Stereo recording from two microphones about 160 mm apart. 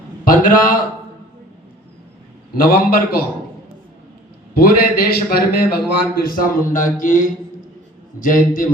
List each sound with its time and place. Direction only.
0.3 s a man's voice: 60° left (ahead or behind)
2.6 s a man's voice: 65° left (ahead or behind)
4.5 s a man's voice: 70° left (ahead or behind)